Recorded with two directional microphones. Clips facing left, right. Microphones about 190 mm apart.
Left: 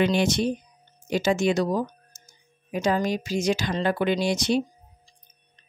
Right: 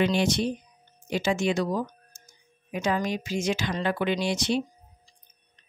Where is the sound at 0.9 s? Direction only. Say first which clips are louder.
Left 3 dB; 40° left (ahead or behind).